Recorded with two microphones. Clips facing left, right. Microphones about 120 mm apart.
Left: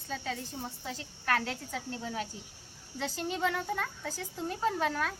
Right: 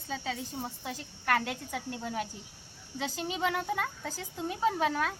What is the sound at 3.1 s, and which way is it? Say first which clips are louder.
A child's voice: even; 15° right (ahead or behind).